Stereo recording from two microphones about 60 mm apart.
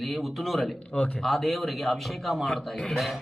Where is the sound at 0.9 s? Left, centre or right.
Centre.